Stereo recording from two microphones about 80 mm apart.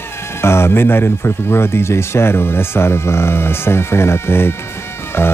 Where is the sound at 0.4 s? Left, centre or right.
Left.